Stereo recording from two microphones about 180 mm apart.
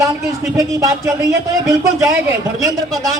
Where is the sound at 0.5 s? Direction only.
15° right (ahead or behind).